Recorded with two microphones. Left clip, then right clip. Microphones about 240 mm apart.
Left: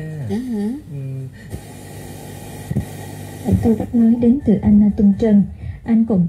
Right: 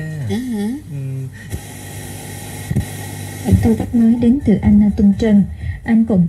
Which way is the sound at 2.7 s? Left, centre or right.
Right.